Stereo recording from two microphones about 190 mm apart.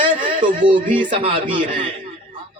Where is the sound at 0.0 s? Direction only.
25° right (ahead or behind).